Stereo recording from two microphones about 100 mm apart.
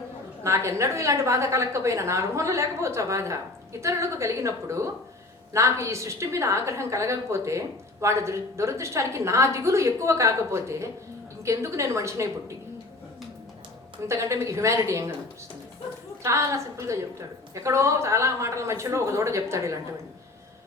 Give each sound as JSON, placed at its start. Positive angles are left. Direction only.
{"t": 0.4, "sound": "a woman's voice", "side_deg": -30}
{"t": 14.1, "sound": "a woman's voice", "side_deg": -30}
{"t": 16.2, "sound": "a woman's voice", "side_deg": -30}